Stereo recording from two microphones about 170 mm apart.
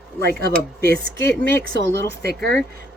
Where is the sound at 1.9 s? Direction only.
70° right (ahead or behind).